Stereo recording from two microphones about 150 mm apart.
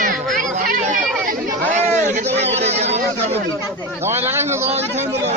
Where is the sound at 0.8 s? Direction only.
60° right (ahead or behind).